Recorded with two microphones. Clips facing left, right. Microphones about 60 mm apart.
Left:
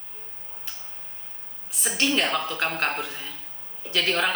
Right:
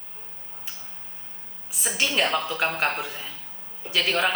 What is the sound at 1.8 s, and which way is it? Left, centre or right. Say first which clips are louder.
A woman's voice: even; centre.